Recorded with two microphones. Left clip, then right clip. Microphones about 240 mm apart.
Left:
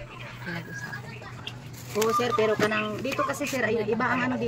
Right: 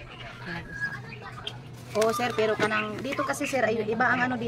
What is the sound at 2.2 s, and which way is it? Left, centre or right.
Speech, right.